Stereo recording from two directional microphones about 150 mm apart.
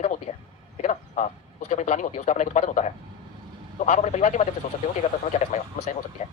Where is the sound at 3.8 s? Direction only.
50° left (ahead or behind).